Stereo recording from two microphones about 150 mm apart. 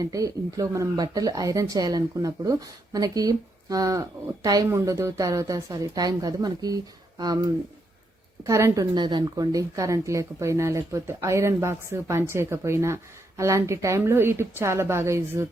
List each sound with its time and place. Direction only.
0.0 s a woman's voice: 25° right (ahead or behind)